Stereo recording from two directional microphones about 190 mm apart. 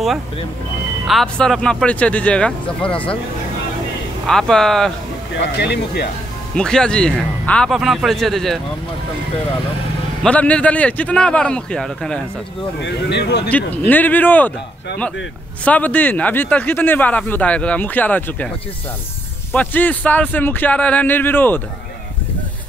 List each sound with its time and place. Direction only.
1.0 s speech: centre (ahead or behind)
4.3 s speech: 5° left (ahead or behind)
5.4 s speech: 60° left (ahead or behind)
6.5 s speech: 5° left (ahead or behind)
10.2 s speech: 5° left (ahead or behind)
12.8 s speech: 60° left (ahead or behind)
13.5 s speech: 10° left (ahead or behind)
15.6 s speech: 10° left (ahead or behind)
19.5 s speech: 10° left (ahead or behind)